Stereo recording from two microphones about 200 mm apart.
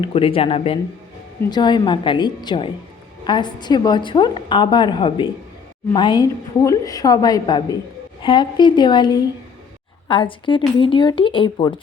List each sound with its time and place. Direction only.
0.0 s a woman's voice: 25° left (ahead or behind)